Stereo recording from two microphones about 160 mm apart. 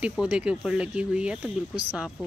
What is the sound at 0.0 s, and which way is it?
Speech, 5° right (ahead or behind).